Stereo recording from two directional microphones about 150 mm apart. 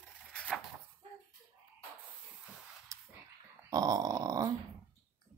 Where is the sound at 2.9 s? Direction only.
20° right (ahead or behind).